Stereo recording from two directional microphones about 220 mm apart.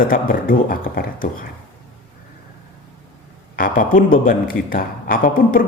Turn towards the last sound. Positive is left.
turn(degrees=40)  # may be behind; listen again after turning